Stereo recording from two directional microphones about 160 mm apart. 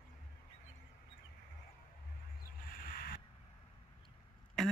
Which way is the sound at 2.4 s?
65° left (ahead or behind).